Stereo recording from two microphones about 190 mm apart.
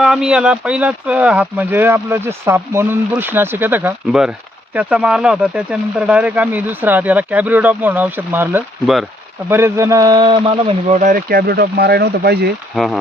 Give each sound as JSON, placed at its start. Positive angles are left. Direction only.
{"t": 0.0, "sound": "speech", "side_deg": 0}
{"t": 12.7, "sound": "speech", "side_deg": 0}